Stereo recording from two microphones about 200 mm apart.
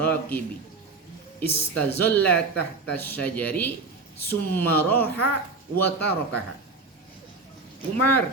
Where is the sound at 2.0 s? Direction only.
10° left (ahead or behind).